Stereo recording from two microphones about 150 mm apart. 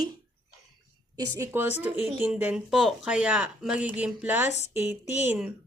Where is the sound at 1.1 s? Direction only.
15° right (ahead or behind).